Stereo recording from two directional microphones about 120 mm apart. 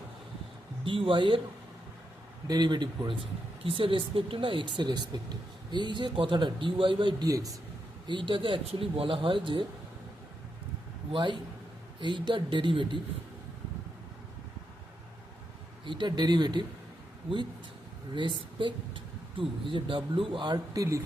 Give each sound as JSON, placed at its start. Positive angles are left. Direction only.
{"t": 0.9, "sound": "speech", "side_deg": -45}
{"t": 2.5, "sound": "speech", "side_deg": -35}
{"t": 11.1, "sound": "speech", "side_deg": -40}
{"t": 15.9, "sound": "speech", "side_deg": -40}
{"t": 18.1, "sound": "speech", "side_deg": -40}